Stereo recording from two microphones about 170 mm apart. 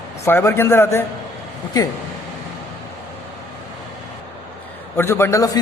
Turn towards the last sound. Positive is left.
turn(degrees=15)  # may be behind; listen again after turning